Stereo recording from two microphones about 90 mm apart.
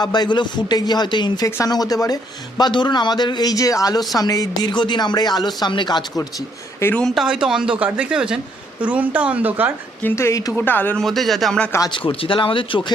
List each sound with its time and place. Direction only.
0.0 s speech: 50° left (ahead or behind)
1.6 s speech: 45° left (ahead or behind)
2.6 s speech: 55° left (ahead or behind)
7.0 s speech: centre (ahead or behind); by 9.7 s 20° right (ahead or behind)
10.0 s speech: 25° left (ahead or behind)
10.6 s speech: 20° left (ahead or behind)
10.9 s speech: centre (ahead or behind)
11.9 s speech: 75° left (ahead or behind)